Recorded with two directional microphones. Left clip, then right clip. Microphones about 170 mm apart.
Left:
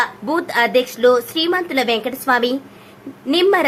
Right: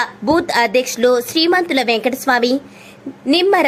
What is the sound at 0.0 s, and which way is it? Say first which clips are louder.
A woman's voice: right 3 dB; 25° right (ahead or behind).